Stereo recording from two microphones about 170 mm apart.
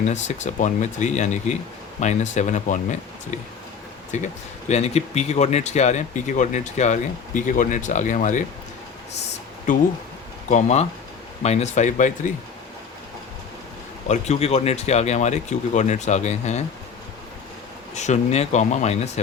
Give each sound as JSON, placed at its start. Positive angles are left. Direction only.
{"t": 0.1, "sound": "speech", "side_deg": 45}
{"t": 4.1, "sound": "speech", "side_deg": 45}
{"t": 9.7, "sound": "speech", "side_deg": 50}
{"t": 10.5, "sound": "speech", "side_deg": 40}
{"t": 14.1, "sound": "speech", "side_deg": 40}
{"t": 17.9, "sound": "speech", "side_deg": 45}